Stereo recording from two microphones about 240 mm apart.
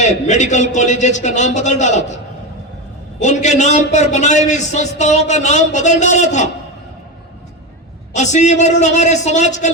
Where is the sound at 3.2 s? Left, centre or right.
Left.